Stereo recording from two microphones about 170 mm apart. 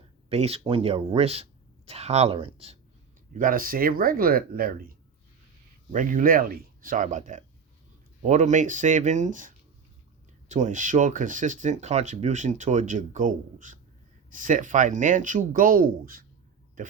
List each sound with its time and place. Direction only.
0.3 s speech: 40° right (ahead or behind)
3.3 s speech: 55° right (ahead or behind)